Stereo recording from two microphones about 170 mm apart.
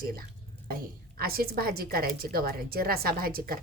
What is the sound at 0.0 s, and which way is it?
A woman's voice, 60° right (ahead or behind).